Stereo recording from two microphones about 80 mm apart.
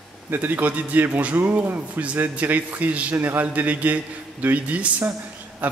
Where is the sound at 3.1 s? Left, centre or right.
Right.